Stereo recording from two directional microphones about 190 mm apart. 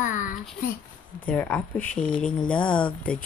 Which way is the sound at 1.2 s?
10° left (ahead or behind).